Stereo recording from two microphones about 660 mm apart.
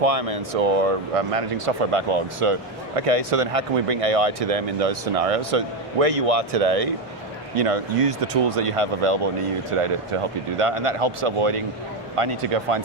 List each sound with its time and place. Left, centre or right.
0.0 s speech: right